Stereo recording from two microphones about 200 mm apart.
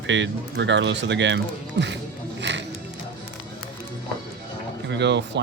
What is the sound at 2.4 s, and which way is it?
Music, 60° right (ahead or behind).